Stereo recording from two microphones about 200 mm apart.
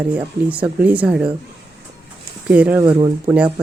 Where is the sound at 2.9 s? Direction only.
20° right (ahead or behind).